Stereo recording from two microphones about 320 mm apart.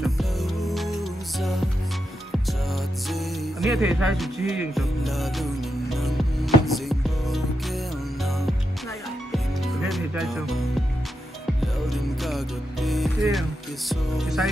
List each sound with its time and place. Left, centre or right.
0.0 s music: centre
9.8 s music: centre
11.9 s music: centre